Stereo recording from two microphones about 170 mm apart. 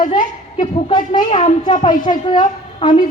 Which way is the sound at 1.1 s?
30° left (ahead or behind).